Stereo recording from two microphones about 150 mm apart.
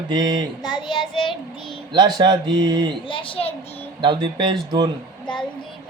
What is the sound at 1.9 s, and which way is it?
Mantra, 30° right (ahead or behind).